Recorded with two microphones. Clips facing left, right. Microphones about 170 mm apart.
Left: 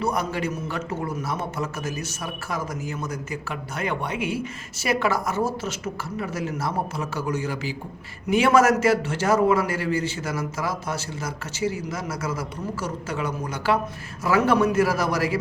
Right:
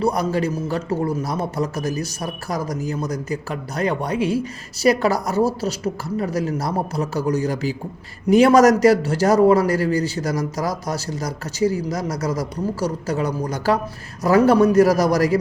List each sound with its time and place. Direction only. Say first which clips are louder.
0.0 s a man's voice: right 5 dB; 35° right (ahead or behind)